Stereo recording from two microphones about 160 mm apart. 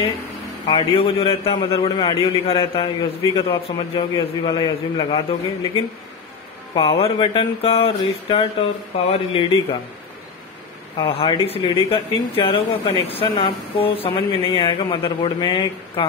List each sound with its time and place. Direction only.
0.7 s a man's voice: 35° left (ahead or behind)
6.7 s a man's voice: 35° left (ahead or behind)
11.0 s a man's voice: 30° left (ahead or behind)